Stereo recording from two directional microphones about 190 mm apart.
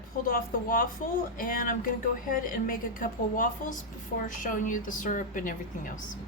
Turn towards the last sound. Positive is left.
turn(degrees=45)  # may be behind; listen again after turning